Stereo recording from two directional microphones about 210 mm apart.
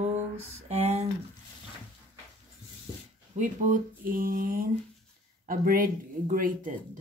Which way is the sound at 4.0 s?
45° right (ahead or behind).